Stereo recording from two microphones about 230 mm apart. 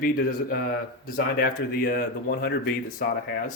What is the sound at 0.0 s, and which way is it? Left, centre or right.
Speech, left.